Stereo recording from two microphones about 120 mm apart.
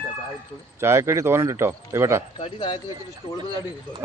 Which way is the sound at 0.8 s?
20° right (ahead or behind).